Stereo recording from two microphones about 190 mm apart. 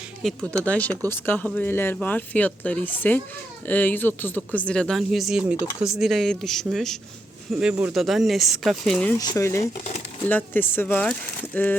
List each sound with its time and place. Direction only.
0.5 s speech: 10° left (ahead or behind)
9.1 s speech: 20° left (ahead or behind)